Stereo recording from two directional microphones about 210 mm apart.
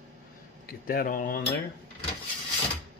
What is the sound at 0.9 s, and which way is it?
Speech, 45° left (ahead or behind).